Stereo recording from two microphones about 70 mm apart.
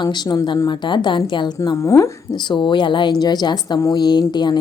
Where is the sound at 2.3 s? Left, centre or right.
Left.